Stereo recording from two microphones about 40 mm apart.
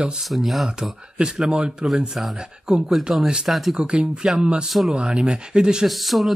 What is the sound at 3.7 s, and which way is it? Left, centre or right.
Speech, centre.